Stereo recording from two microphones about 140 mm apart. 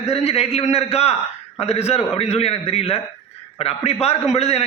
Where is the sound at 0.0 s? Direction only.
50° left (ahead or behind).